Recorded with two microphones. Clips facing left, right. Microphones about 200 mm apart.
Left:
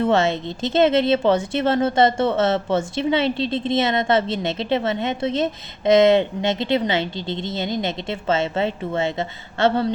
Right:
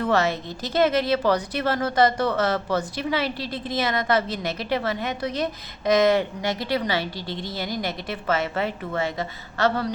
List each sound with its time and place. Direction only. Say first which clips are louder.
0.0 s speech: left 4 dB; 25° left (ahead or behind)